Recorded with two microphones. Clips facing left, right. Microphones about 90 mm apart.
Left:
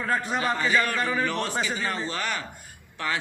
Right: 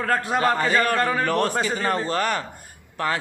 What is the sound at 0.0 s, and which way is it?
A man's voice, 55° right (ahead or behind).